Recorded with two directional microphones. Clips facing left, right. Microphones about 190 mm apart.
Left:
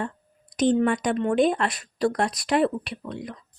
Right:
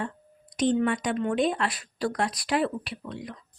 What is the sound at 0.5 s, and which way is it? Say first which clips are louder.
Speech: left 3 dB; 45° left (ahead or behind).